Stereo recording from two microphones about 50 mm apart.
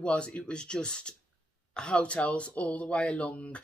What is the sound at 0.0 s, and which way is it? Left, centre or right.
Speech, centre.